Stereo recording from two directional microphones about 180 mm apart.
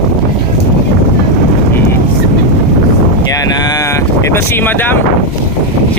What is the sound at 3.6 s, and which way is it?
Speech, 20° left (ahead or behind).